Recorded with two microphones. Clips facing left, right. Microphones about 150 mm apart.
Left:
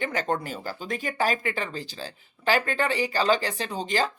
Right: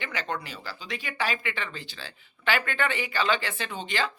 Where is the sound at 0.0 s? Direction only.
45° left (ahead or behind).